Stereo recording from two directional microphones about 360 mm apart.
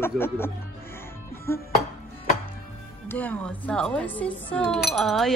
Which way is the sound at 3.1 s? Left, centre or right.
Centre.